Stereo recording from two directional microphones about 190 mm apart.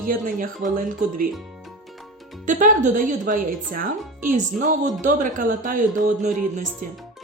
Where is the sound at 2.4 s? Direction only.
45° right (ahead or behind).